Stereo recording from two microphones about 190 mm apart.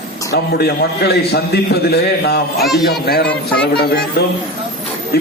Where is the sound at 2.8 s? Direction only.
55° left (ahead or behind).